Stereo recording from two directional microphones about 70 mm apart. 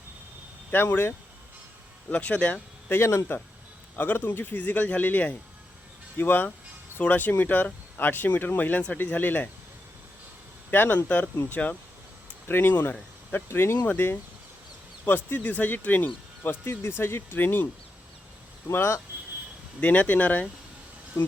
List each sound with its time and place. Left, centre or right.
0.7 s speech: left
2.0 s speech: centre
2.9 s speech: left
3.9 s speech: left
10.7 s speech: left
17.0 s speech: left
18.7 s speech: left
19.8 s speech: left